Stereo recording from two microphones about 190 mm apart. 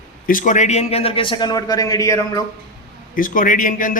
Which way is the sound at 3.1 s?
45° left (ahead or behind).